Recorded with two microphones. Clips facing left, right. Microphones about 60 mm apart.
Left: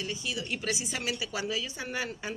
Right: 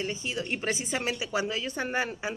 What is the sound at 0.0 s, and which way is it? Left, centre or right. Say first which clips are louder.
A woman's voice: right 3 dB; right.